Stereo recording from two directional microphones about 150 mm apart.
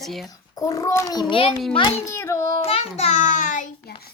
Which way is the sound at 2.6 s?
40° left (ahead or behind).